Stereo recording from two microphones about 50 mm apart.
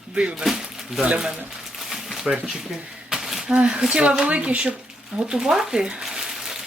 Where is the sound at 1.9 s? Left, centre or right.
Centre.